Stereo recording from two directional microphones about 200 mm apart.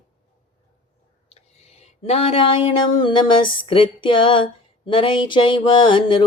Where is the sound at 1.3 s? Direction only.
30° left (ahead or behind).